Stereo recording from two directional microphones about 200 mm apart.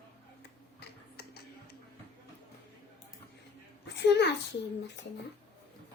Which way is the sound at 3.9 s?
60° left (ahead or behind).